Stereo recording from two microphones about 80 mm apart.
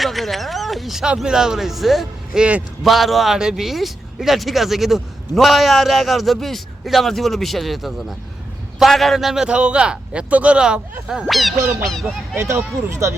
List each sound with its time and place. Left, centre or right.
0.0 s speech: centre
2.4 s a man's voice: centre
2.8 s a man's voice: centre
12.9 s speech: right